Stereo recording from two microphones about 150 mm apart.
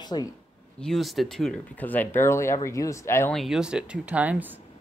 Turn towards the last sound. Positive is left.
turn(degrees=-10)  # may be behind; listen again after turning